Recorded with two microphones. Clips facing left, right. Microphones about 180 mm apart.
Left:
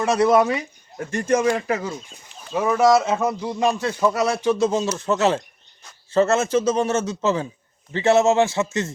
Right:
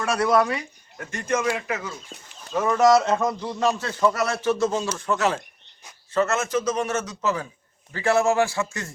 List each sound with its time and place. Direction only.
0.0 s a man's voice: 20° left (ahead or behind)
0.9 s speech: 30° left (ahead or behind)
2.5 s a man's voice: 10° left (ahead or behind)